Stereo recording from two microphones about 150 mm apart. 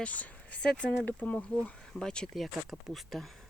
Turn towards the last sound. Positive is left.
turn(degrees=0)  # may be behind; listen again after turning